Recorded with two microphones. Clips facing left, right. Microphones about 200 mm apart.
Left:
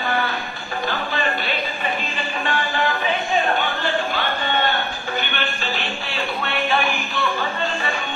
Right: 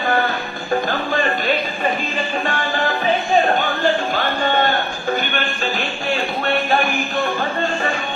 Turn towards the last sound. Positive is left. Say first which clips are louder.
# right 4 dB
turn(degrees=-45)  # may be behind; listen again after turning